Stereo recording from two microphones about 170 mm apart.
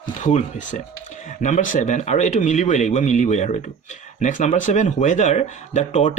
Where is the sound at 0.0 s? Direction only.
45° left (ahead or behind).